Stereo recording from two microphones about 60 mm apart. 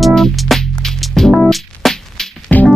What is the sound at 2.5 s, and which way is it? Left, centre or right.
Music, left.